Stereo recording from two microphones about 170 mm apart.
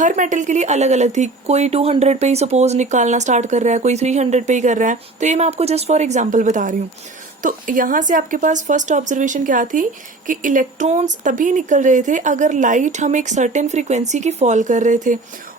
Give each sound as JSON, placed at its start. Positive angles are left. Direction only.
{"t": 0.0, "sound": "speech", "side_deg": -45}